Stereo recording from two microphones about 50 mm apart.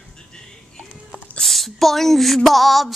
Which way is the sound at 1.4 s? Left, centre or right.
Centre.